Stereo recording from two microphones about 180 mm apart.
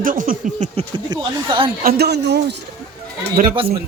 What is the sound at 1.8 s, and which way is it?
Speech, 60° right (ahead or behind).